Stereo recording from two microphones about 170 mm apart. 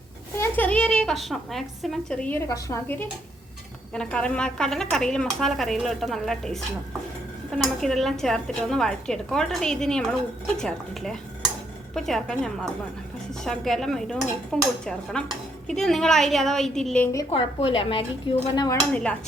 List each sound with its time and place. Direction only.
0.3 s a woman's voice: 10° left (ahead or behind)
7.6 s speech: centre (ahead or behind)
17.3 s speech: 30° left (ahead or behind)